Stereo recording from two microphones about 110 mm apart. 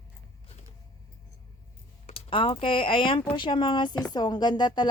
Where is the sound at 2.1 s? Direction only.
60° left (ahead or behind); by 4.9 s 40° left (ahead or behind).